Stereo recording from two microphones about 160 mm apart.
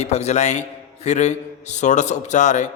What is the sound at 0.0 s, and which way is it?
A man's voice, 45° left (ahead or behind).